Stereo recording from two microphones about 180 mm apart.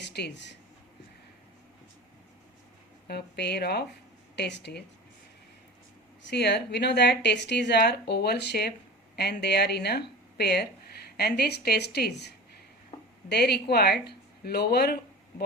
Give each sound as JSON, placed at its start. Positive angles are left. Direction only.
{"t": 0.1, "sound": "speech", "side_deg": 70}
{"t": 3.1, "sound": "a woman's voice", "side_deg": 65}
{"t": 6.2, "sound": "a woman's voice", "side_deg": 65}